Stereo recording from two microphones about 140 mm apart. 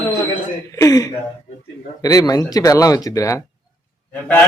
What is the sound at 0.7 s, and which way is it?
Speech, 25° left (ahead or behind).